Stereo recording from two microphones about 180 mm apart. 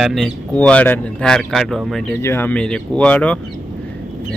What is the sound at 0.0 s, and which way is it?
A man's voice, centre (ahead or behind).